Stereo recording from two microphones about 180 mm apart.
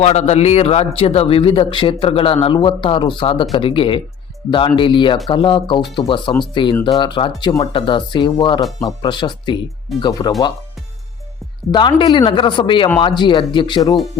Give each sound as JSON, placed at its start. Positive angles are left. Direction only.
{"t": 0.0, "sound": "a man's voice", "side_deg": 35}
{"t": 11.7, "sound": "speech", "side_deg": 25}